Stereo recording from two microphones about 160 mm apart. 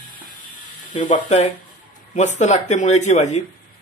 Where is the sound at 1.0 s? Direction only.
50° left (ahead or behind).